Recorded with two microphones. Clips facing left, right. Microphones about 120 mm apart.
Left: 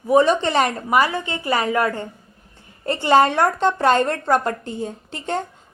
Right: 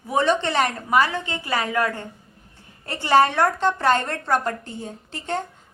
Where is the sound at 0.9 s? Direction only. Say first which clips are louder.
Left 1 dB; 10° left (ahead or behind).